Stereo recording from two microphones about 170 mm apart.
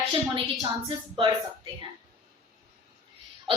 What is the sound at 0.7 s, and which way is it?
Speech, 25° right (ahead or behind).